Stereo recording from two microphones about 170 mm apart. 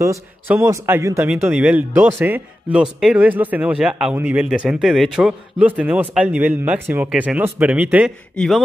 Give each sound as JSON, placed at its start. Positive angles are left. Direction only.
{"t": 0.0, "sound": "a man's voice", "side_deg": -15}